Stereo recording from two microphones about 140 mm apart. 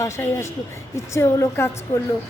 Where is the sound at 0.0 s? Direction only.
15° left (ahead or behind).